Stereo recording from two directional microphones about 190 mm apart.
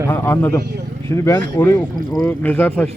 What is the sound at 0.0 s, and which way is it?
Speech, 10° left (ahead or behind).